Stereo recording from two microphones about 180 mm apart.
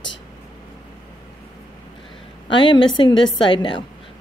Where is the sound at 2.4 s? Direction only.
25° left (ahead or behind).